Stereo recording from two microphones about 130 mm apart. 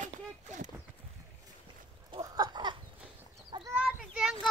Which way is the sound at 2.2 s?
30° right (ahead or behind).